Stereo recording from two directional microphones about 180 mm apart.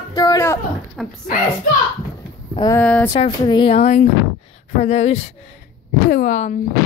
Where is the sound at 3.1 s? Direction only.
25° left (ahead or behind).